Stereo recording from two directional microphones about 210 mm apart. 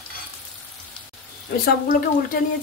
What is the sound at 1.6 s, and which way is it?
Speech, 40° left (ahead or behind).